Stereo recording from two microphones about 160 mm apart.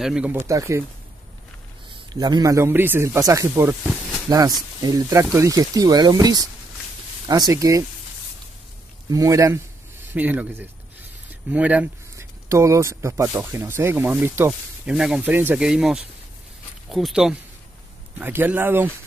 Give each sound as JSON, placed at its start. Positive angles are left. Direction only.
{"t": 0.0, "sound": "speech", "side_deg": -5}
{"t": 0.5, "sound": "speech", "side_deg": -20}
{"t": 2.1, "sound": "speech", "side_deg": -25}
{"t": 9.1, "sound": "speech", "side_deg": -20}